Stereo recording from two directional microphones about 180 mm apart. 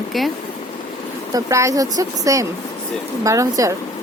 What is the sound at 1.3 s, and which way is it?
Speech, 20° right (ahead or behind).